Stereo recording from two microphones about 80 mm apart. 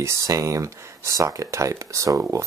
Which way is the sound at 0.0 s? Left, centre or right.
Right.